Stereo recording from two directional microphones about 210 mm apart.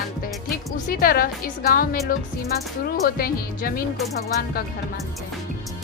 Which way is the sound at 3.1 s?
45° left (ahead or behind).